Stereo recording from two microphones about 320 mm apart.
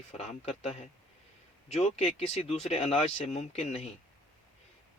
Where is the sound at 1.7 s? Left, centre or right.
Centre.